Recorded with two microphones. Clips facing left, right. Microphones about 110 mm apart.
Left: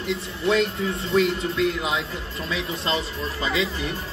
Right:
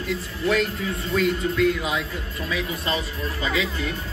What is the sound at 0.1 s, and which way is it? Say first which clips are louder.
Speech: left 1 dB; 25° left (ahead or behind).